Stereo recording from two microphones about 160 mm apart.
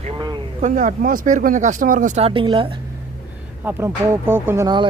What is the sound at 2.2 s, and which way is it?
Speech, 35° right (ahead or behind).